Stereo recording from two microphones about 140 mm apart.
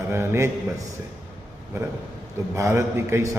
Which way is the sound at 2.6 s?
20° right (ahead or behind).